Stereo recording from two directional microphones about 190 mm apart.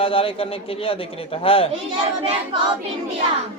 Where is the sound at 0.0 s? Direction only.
30° left (ahead or behind).